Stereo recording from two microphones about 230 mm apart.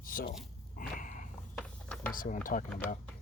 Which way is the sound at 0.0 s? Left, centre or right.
Left.